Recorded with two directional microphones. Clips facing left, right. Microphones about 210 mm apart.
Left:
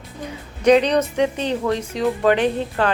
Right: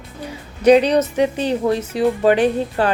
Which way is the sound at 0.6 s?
10° right (ahead or behind).